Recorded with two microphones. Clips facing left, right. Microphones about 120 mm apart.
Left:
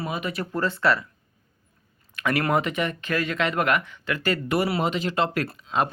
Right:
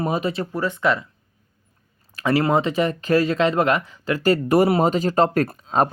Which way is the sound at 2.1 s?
30° right (ahead or behind).